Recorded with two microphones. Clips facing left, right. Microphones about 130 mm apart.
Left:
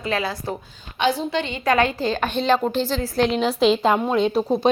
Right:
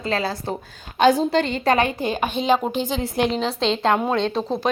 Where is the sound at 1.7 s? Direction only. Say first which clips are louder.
Left 3 dB; 20° right (ahead or behind).